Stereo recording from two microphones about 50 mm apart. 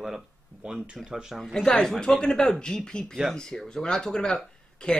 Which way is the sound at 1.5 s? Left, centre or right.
Centre.